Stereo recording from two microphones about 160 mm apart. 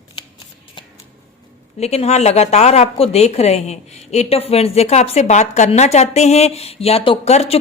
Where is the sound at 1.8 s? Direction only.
40° left (ahead or behind).